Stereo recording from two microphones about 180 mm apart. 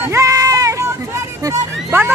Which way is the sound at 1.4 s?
15° right (ahead or behind).